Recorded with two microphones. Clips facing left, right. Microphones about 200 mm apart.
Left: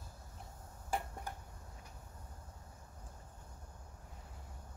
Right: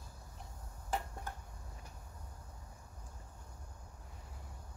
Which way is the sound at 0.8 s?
10° left (ahead or behind).